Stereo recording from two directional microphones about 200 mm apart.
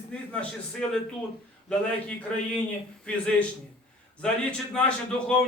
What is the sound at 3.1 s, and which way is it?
Speech, 5° left (ahead or behind).